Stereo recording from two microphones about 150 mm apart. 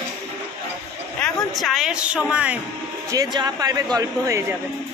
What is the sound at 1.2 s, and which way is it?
Speech, centre (ahead or behind).